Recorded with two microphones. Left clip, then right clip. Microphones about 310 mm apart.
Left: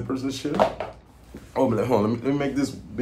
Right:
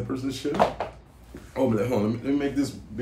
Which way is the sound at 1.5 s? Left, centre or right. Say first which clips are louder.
Left 3 dB; centre.